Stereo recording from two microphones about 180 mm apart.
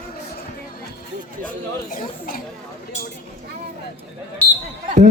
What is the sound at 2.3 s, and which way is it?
Speech, 55° left (ahead or behind).